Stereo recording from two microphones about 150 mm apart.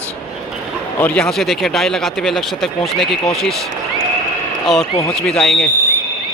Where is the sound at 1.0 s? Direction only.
10° left (ahead or behind).